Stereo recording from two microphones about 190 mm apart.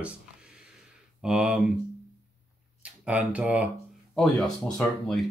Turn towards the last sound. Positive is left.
turn(degrees=0)  # may be behind; listen again after turning